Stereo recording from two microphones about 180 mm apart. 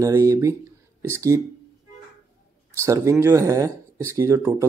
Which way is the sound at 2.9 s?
15° right (ahead or behind).